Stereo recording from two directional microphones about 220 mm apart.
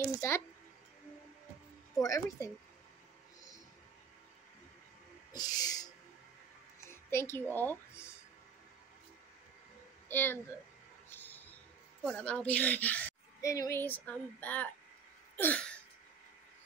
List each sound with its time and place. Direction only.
2.0 s a woman's voice: 15° left (ahead or behind)
5.3 s owl: 20° left (ahead or behind)
6.9 s speech: 10° left (ahead or behind)
10.0 s a child's voice: 10° left (ahead or behind)
11.1 s a sound: 10° left (ahead or behind)
12.0 s a woman's voice: 5° left (ahead or behind)
15.3 s a sound: 5° left (ahead or behind)